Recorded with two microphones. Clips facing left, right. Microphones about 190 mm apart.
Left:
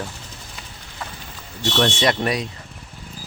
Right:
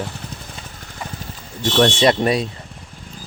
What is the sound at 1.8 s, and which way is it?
Speech, 25° right (ahead or behind).